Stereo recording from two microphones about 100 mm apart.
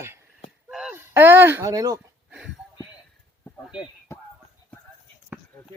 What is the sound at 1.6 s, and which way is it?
Speech, 35° right (ahead or behind).